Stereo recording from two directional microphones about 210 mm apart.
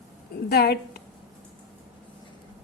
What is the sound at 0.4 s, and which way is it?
Speech, 50° left (ahead or behind).